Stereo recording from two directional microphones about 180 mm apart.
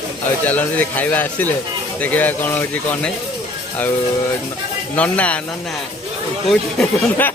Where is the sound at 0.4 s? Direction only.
10° left (ahead or behind).